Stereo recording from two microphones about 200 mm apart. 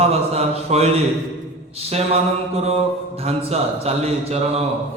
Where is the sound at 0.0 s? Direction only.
30° right (ahead or behind).